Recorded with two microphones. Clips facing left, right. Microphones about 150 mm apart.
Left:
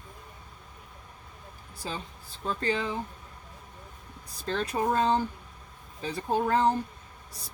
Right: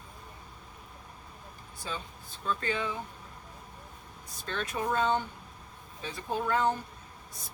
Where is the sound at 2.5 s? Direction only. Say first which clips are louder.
Left 2 dB; 35° left (ahead or behind).